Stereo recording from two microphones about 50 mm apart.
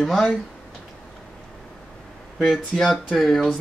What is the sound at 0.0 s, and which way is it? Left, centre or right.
Speech, centre.